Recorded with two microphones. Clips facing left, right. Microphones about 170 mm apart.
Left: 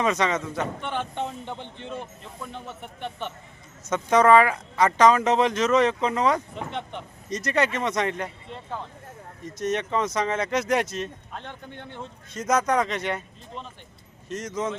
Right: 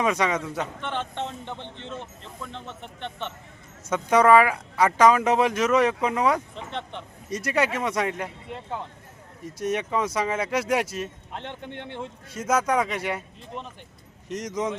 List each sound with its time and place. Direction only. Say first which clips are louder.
0.0 s speech: even; 10° right (ahead or behind)
0.8 s speech: left 1 dB; 10° left (ahead or behind)
3.8 s speech: even; 10° right (ahead or behind)
6.7 s speech: right 1 dB; 5° left (ahead or behind)
7.3 s speech: even; 10° right (ahead or behind)
9.6 s speech: even; 10° right (ahead or behind)
11.3 s speech: right 3 dB; 25° right (ahead or behind)
12.3 s speech: left 1 dB; 5° right (ahead or behind)